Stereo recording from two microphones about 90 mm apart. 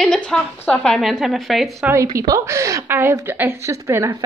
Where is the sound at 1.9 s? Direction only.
40° right (ahead or behind).